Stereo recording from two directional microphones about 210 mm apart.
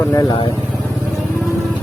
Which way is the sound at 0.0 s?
15° left (ahead or behind).